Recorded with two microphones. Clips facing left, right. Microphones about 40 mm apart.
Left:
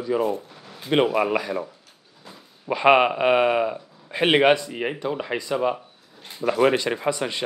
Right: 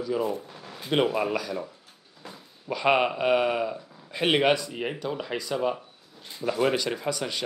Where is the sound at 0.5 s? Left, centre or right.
Right.